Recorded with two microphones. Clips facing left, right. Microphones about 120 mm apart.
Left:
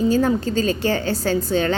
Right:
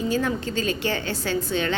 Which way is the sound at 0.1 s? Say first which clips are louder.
Left 6 dB; 40° left (ahead or behind).